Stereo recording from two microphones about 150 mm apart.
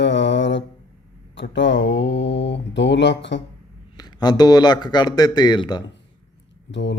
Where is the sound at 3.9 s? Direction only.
25° left (ahead or behind).